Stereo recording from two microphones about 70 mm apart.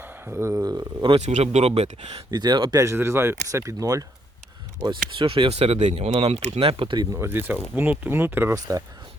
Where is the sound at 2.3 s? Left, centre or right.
Right.